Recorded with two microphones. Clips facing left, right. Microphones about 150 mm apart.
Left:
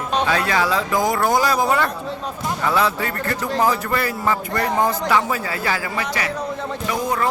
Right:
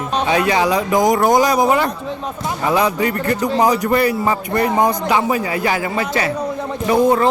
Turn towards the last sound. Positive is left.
turn(degrees=-30)  # may be behind; listen again after turning